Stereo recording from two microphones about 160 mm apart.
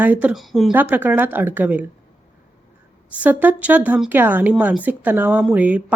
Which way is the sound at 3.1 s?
10° right (ahead or behind).